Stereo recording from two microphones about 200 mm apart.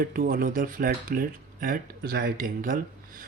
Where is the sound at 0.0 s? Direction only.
45° right (ahead or behind).